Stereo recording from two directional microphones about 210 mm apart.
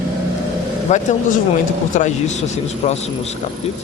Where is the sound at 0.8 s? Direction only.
35° left (ahead or behind).